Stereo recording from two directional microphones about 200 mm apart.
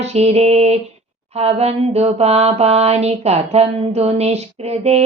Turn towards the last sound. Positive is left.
turn(degrees=-30)  # may be behind; listen again after turning